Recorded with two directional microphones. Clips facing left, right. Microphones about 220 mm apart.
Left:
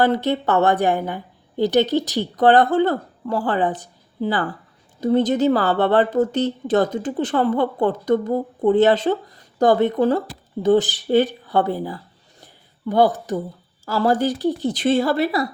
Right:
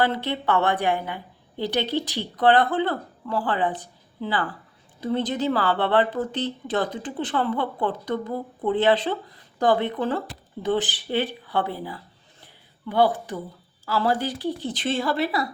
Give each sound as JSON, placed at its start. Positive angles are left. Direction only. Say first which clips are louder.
{"t": 0.0, "sound": "a woman's voice", "louder": "left 6 dB", "side_deg": 45}